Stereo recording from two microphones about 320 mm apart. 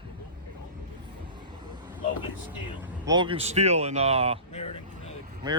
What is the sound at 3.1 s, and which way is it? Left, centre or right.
Speech, centre.